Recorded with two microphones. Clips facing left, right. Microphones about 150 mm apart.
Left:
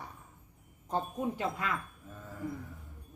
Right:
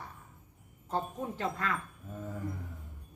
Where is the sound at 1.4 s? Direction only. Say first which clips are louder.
Even; 10° left (ahead or behind).